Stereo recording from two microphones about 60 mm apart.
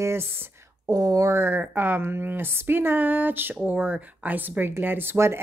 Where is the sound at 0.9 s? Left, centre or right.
Right.